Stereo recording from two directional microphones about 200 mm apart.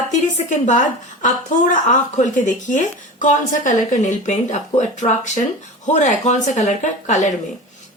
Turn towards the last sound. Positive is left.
turn(degrees=35)  # may be behind; listen again after turning